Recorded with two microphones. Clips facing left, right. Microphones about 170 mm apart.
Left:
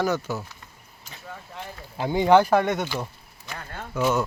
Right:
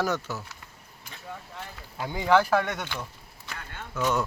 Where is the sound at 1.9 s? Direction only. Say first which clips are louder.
Left 5 dB; 25° left (ahead or behind).